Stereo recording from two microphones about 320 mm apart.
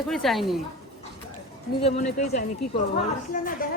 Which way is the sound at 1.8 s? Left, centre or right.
Centre.